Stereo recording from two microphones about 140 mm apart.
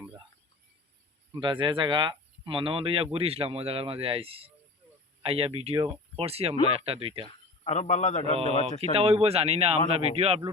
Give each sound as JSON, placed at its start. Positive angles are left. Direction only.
{"t": 1.3, "sound": "speech", "side_deg": -35}
{"t": 7.6, "sound": "a man's voice", "side_deg": 50}
{"t": 8.8, "sound": "speech", "side_deg": -45}